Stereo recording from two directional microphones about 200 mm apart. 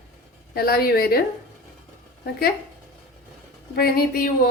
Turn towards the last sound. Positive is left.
turn(degrees=50)  # may be behind; listen again after turning